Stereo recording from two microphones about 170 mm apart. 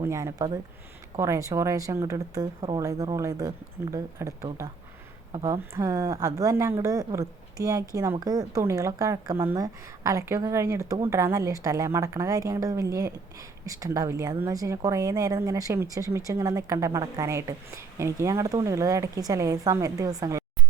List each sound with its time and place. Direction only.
0.0 s a woman's voice: 15° right (ahead or behind)